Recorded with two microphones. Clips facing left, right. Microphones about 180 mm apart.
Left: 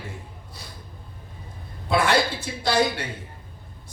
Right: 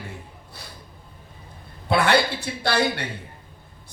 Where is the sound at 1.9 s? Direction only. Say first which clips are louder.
Right 1 dB; 65° right (ahead or behind).